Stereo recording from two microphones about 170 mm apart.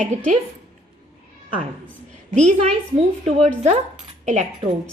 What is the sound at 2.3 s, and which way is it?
Speech, 40° right (ahead or behind).